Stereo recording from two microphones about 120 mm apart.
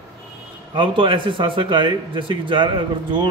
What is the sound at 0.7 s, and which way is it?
A man's voice, 45° right (ahead or behind).